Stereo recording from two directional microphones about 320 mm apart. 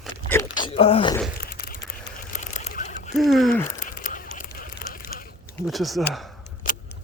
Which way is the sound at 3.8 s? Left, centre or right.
Left.